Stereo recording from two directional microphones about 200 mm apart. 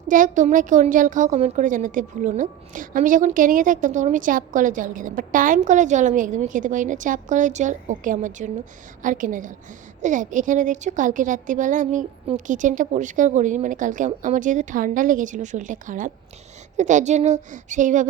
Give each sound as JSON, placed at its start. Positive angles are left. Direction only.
{"t": 0.1, "sound": "a woman's voice", "side_deg": -40}